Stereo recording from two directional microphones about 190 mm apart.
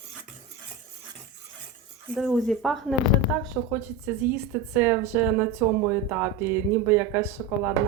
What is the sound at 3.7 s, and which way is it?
Speech, 10° right (ahead or behind).